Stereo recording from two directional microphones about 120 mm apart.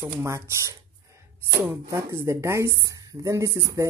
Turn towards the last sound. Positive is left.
turn(degrees=-25)  # may be behind; listen again after turning